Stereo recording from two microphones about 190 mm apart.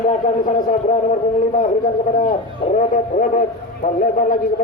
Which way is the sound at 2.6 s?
35° left (ahead or behind).